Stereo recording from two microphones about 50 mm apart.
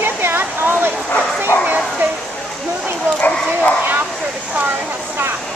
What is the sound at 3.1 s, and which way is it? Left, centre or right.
Dog, left.